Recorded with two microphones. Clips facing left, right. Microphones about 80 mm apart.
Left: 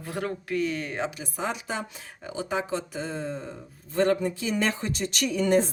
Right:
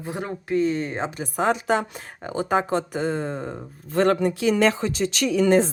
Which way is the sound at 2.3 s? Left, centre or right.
Right.